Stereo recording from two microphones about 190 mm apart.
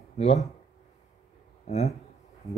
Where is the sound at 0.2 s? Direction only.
35° left (ahead or behind).